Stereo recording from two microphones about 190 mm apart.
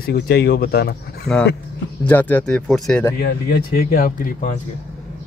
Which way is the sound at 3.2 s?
55° left (ahead or behind).